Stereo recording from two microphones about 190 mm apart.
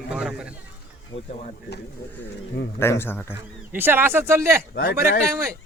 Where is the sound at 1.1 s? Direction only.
30° left (ahead or behind).